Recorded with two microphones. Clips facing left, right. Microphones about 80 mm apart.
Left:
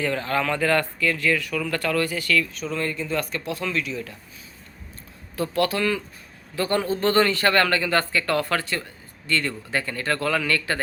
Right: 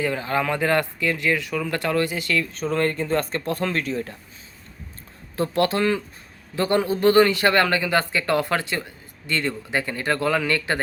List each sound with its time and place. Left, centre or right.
0.0 s speech: centre; by 4.2 s right
5.4 s speech: right